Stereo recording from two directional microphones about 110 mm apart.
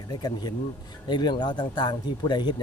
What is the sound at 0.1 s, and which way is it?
Speech, 40° left (ahead or behind).